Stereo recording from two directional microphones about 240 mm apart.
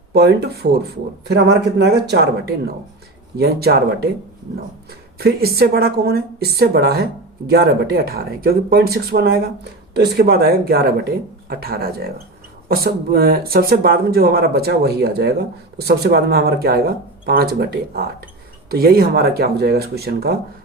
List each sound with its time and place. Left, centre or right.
0.1 s speech: right
5.1 s speech: right